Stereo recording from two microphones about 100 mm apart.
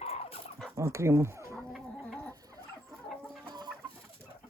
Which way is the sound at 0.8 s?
30° right (ahead or behind).